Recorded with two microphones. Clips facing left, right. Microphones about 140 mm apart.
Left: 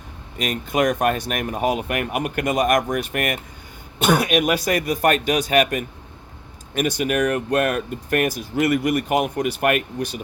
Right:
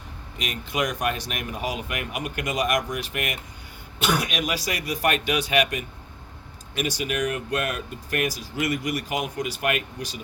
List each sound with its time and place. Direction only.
0.3 s speech: 45° left (ahead or behind)